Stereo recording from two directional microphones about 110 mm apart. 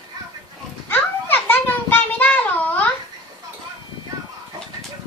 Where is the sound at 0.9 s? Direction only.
20° left (ahead or behind).